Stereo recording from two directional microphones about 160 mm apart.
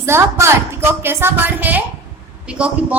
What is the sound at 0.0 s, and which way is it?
A woman's voice, 15° right (ahead or behind).